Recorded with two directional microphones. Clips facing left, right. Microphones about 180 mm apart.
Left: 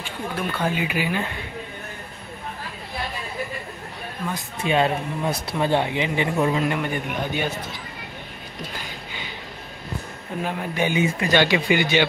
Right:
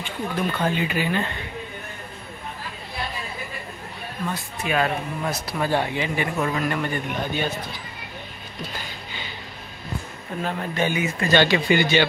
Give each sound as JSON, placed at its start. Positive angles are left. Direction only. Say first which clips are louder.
{"t": 0.4, "sound": "speech", "louder": "right 1 dB", "side_deg": 5}
{"t": 4.6, "sound": "a man's voice", "louder": "left 3 dB", "side_deg": 25}
{"t": 10.4, "sound": "speech", "louder": "even", "side_deg": 10}